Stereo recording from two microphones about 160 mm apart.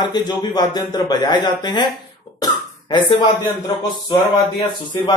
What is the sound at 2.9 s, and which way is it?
Speech, 30° left (ahead or behind).